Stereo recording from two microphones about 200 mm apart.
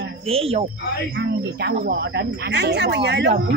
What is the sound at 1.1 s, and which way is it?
Speech, 55° right (ahead or behind).